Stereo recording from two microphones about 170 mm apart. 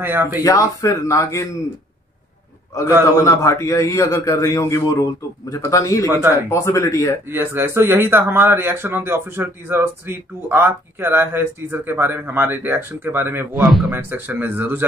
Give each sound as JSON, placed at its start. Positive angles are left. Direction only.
{"t": 0.0, "sound": "speech", "side_deg": -10}
{"t": 0.4, "sound": "a man's voice", "side_deg": 20}
{"t": 3.2, "sound": "a man's voice", "side_deg": 15}
{"t": 7.2, "sound": "speech", "side_deg": -15}
{"t": 13.6, "sound": "a man's voice", "side_deg": 0}
{"t": 13.9, "sound": "speech", "side_deg": -10}